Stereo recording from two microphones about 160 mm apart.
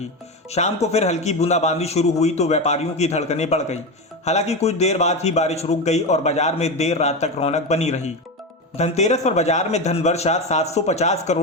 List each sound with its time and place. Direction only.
0.5 s a man's voice: 40° left (ahead or behind)